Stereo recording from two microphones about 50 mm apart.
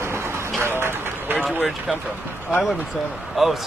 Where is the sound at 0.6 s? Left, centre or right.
Right.